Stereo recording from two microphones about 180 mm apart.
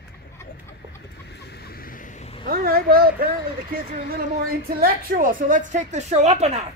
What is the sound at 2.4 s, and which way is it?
A woman's voice, 55° right (ahead or behind).